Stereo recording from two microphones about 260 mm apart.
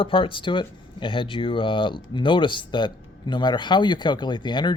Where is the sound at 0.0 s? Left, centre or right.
Centre.